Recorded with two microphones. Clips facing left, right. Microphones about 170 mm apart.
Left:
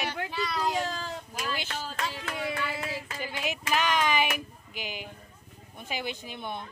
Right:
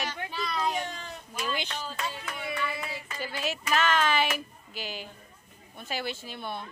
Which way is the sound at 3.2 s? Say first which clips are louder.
Right 3 dB; 15° left (ahead or behind).